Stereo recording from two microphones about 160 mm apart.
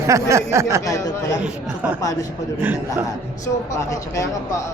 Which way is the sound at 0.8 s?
20° left (ahead or behind).